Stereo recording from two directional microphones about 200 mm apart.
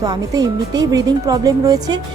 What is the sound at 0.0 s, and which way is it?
Speech, 20° right (ahead or behind).